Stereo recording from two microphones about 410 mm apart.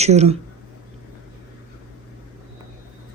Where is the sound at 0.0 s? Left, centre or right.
Centre.